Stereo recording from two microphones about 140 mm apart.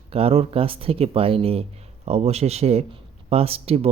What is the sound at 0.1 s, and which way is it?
Speech, 45° right (ahead or behind).